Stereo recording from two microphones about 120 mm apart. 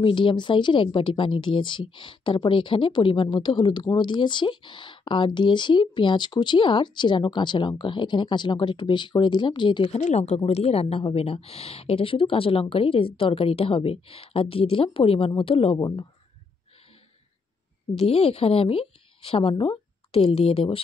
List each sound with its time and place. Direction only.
0.0 s speech: 45° left (ahead or behind)
9.9 s a woman's voice: 70° left (ahead or behind); by 15.8 s 50° left (ahead or behind)
17.9 s a woman's voice: 55° left (ahead or behind)
19.5 s speech: 40° left (ahead or behind)
20.1 s a woman's voice: 55° left (ahead or behind)